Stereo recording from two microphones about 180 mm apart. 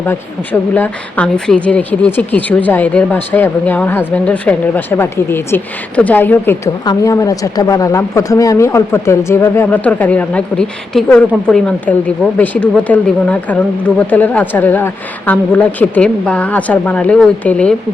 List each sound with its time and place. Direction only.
0.0 s a woman's voice: 10° left (ahead or behind)